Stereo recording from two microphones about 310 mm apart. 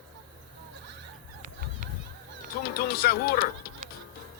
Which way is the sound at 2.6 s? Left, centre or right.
Left.